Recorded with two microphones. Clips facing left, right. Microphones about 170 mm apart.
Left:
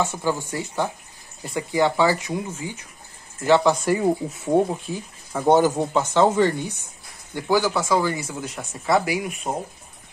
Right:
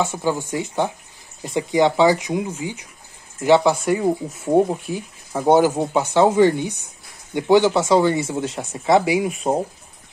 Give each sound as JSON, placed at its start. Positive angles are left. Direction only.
{"t": 0.0, "sound": "speech", "side_deg": -15}
{"t": 3.8, "sound": "speech", "side_deg": 0}
{"t": 4.6, "sound": "speech", "side_deg": -10}